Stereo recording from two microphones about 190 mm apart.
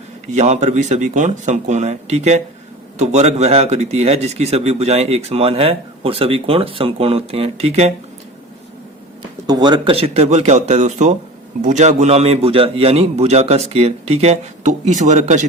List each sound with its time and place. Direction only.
0.3 s speech: 35° right (ahead or behind)
9.5 s speech: 20° right (ahead or behind); by 15.4 s 40° right (ahead or behind)